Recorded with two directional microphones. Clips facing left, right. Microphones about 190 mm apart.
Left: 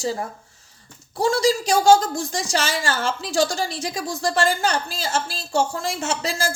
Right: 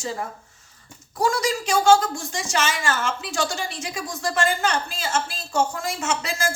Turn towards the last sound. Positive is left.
turn(degrees=35)  # may be behind; listen again after turning